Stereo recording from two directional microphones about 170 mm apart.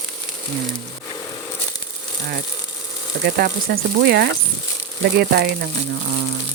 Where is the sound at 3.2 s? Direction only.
60° right (ahead or behind).